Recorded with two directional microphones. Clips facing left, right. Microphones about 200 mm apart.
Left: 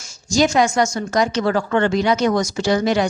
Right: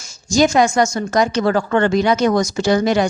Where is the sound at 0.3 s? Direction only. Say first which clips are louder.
Right 2 dB; 45° right (ahead or behind).